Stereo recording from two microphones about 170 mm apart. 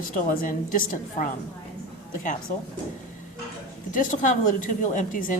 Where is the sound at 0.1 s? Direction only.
50° left (ahead or behind).